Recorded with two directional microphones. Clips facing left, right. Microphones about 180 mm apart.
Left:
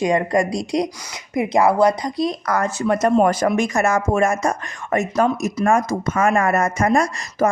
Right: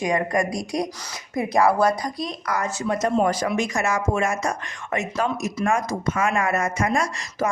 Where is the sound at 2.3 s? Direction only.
50° left (ahead or behind).